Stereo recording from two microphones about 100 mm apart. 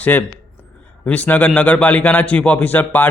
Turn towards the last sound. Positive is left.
turn(degrees=20)  # may be behind; listen again after turning